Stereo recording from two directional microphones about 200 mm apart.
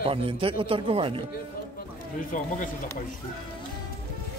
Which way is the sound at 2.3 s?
40° left (ahead or behind).